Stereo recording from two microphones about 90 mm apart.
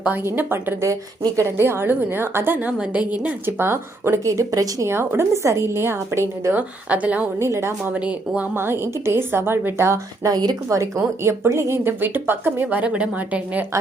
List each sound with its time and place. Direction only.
0.2 s a woman's voice: 25° right (ahead or behind)
6.5 s a woman's voice: 15° right (ahead or behind)
7.3 s a woman's voice: 35° right (ahead or behind)
7.9 s a woman's voice: 15° right (ahead or behind)
8.5 s a woman's voice: 25° right (ahead or behind)
10.2 s speech: 45° right (ahead or behind)
10.8 s a woman's voice: 30° right (ahead or behind)
12.6 s a woman's voice: 15° right (ahead or behind)